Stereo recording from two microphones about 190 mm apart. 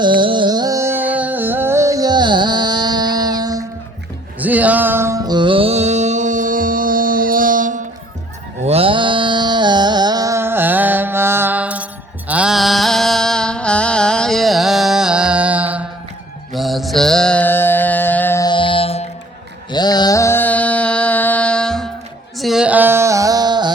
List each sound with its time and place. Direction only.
0.0 s music: 25° right (ahead or behind)
4.4 s music: 10° right (ahead or behind); by 7.8 s 45° right (ahead or behind)
8.6 s music: 30° right (ahead or behind); by 15.9 s 10° right (ahead or behind)
16.5 s mantra: centre (ahead or behind)
18.4 s music: 25° left (ahead or behind)
19.7 s mantra: 20° left (ahead or behind); by 21.8 s 5° left (ahead or behind)
22.4 s a sound: centre (ahead or behind); by 23.7 s 20° right (ahead or behind)